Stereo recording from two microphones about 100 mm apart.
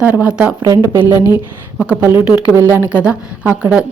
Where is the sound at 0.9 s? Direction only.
20° right (ahead or behind).